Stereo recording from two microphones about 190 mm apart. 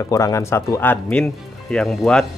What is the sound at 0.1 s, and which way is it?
Speech, 15° left (ahead or behind).